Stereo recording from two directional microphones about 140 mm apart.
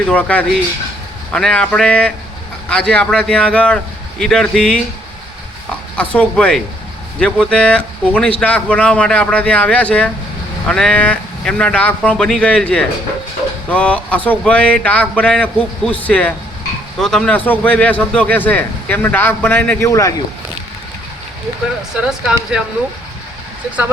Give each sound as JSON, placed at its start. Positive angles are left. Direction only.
{"t": 0.1, "sound": "a man's voice", "side_deg": 10}
{"t": 6.0, "sound": "a man's voice", "side_deg": 5}
{"t": 19.9, "sound": "speech", "side_deg": 25}
{"t": 21.9, "sound": "speech", "side_deg": -5}